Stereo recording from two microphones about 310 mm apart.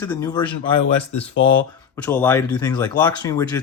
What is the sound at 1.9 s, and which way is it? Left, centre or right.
Speech, centre.